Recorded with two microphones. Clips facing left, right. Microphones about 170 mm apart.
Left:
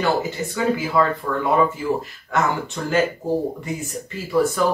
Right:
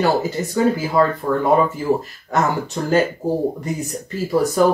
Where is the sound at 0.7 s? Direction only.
40° right (ahead or behind).